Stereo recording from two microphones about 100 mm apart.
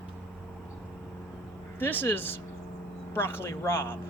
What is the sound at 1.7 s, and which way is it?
Speech, 20° left (ahead or behind).